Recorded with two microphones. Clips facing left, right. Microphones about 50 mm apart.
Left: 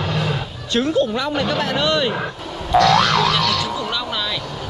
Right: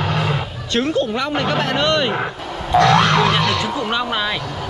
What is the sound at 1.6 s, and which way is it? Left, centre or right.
Speech, right.